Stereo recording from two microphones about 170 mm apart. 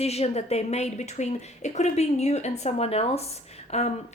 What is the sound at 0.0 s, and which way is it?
A woman's voice, 40° left (ahead or behind).